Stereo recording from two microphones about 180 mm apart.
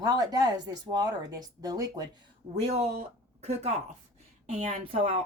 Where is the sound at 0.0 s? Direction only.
20° right (ahead or behind).